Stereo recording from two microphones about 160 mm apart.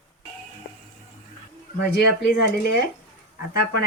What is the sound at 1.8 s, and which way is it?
Speech, 90° left.